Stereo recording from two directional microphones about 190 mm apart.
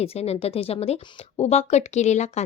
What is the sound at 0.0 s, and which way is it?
A woman's voice, 30° left (ahead or behind).